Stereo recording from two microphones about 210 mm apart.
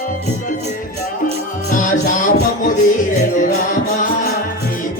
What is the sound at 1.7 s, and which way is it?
Music, 40° left (ahead or behind).